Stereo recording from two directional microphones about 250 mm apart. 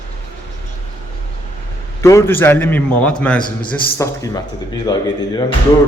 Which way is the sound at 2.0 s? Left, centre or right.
Centre.